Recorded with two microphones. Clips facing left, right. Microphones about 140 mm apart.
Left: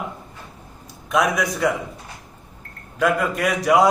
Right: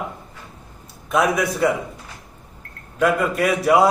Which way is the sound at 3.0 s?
Centre (ahead or behind).